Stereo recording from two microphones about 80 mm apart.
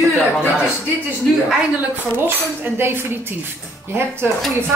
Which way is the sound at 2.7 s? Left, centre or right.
Right.